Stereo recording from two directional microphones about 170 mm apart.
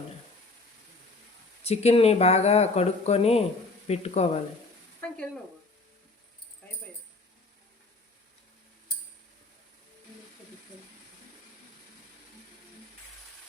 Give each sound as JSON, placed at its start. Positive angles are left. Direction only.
{"t": 1.6, "sound": "speech", "side_deg": 40}
{"t": 4.9, "sound": "sizzle", "side_deg": 5}